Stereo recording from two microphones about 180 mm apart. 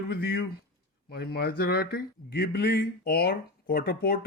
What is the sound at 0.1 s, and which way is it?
Speech, 65° left (ahead or behind).